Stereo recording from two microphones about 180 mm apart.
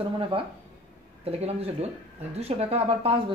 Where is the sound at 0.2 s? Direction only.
30° right (ahead or behind).